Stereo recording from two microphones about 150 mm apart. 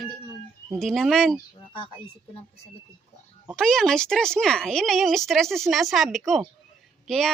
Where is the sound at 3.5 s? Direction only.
5° left (ahead or behind).